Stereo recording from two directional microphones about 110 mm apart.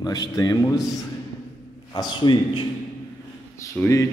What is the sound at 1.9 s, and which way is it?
Speech, 40° left (ahead or behind).